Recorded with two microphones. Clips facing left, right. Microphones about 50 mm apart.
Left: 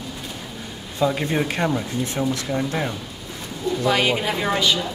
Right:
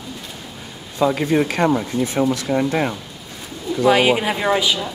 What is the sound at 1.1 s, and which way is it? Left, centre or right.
Speech, centre.